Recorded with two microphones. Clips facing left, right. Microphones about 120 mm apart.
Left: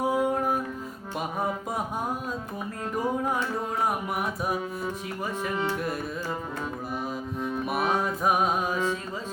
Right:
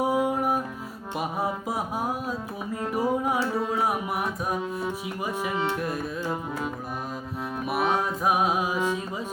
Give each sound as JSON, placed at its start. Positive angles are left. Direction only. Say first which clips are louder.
{"t": 0.0, "sound": "music", "louder": "right 1 dB", "side_deg": -10}
{"t": 2.9, "sound": "music", "louder": "right 2 dB", "side_deg": -10}
{"t": 3.8, "sound": "music", "louder": "right 1 dB", "side_deg": 0}
{"t": 7.5, "sound": "music", "louder": "right 2 dB", "side_deg": 0}